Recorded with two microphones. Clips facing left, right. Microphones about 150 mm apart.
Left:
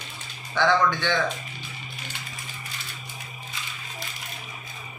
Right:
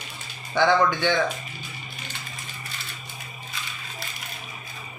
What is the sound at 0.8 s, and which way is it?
Speech, 15° right (ahead or behind).